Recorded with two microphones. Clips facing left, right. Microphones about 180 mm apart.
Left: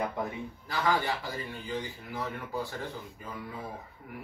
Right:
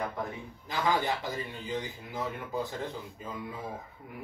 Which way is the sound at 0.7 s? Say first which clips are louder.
Even; 20° right (ahead or behind).